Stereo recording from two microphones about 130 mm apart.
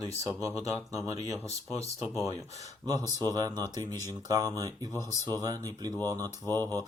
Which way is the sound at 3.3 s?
30° right (ahead or behind).